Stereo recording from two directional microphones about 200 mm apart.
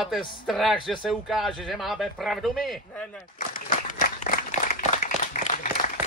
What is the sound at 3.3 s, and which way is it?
Applause, 40° left (ahead or behind).